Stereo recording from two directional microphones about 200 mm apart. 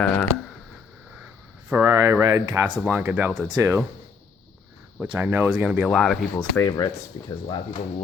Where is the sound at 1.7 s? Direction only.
15° right (ahead or behind).